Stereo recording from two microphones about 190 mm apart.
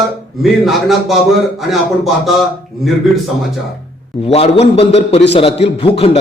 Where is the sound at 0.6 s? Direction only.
Centre (ahead or behind).